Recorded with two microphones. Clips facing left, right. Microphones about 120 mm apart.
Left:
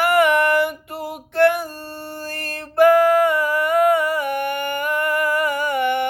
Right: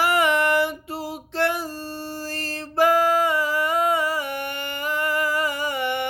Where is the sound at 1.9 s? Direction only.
55° left (ahead or behind).